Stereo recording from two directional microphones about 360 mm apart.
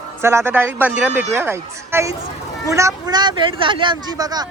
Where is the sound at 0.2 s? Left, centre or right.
Centre.